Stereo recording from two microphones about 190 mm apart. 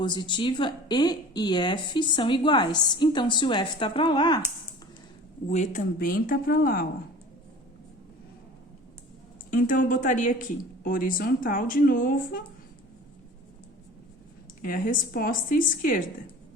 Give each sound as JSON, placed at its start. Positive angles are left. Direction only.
{"t": 0.0, "sound": "speech", "side_deg": 25}
{"t": 5.5, "sound": "a woman's voice", "side_deg": 35}
{"t": 9.5, "sound": "a woman's voice", "side_deg": 45}
{"t": 14.6, "sound": "a woman's voice", "side_deg": 45}